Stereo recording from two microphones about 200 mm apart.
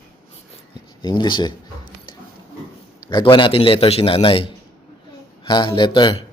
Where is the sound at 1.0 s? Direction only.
20° left (ahead or behind).